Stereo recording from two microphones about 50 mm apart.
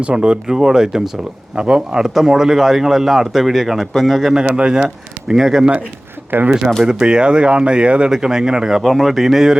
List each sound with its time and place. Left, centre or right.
0.0 s a man's voice: centre
4.5 s speech: centre
6.3 s speech: right
6.8 s speech: centre
8.8 s a man's voice: centre